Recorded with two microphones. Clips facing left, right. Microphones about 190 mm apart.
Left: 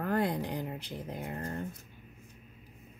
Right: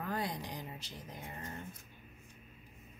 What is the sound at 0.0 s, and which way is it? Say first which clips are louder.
Speech: left 8 dB; 55° left (ahead or behind).